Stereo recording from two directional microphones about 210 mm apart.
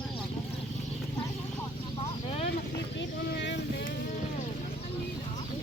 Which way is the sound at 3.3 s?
55° left (ahead or behind).